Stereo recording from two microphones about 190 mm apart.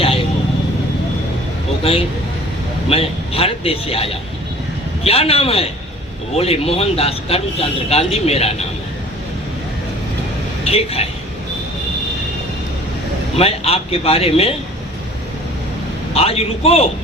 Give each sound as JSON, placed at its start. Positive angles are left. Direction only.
{"t": 1.8, "sound": "a man's voice", "side_deg": 30}
{"t": 10.7, "sound": "speech", "side_deg": 30}
{"t": 13.3, "sound": "speech", "side_deg": 30}
{"t": 16.1, "sound": "speech", "side_deg": 30}